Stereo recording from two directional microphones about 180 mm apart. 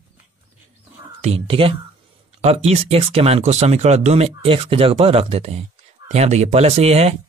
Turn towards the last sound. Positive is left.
turn(degrees=-35)  # may be behind; listen again after turning